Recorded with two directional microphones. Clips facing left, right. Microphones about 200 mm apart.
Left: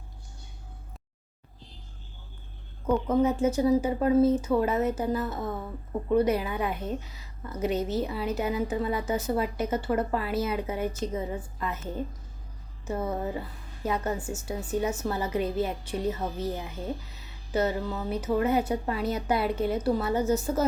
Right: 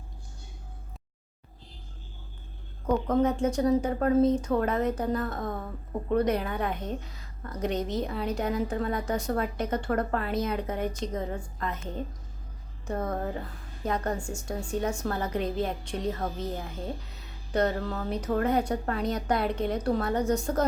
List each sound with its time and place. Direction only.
2.8 s a woman's voice: 5° left (ahead or behind)